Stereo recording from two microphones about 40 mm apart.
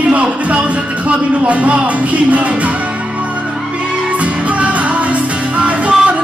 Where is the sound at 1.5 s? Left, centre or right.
Right.